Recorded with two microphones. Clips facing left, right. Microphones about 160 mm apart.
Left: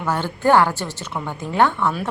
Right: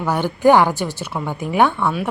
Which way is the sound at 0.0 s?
15° right (ahead or behind).